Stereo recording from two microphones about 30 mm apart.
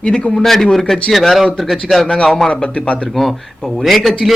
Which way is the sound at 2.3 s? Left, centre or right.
Centre.